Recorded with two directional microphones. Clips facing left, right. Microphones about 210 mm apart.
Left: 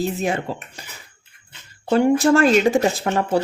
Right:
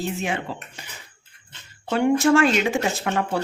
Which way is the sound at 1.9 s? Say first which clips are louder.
Left 3 dB; 35° left (ahead or behind).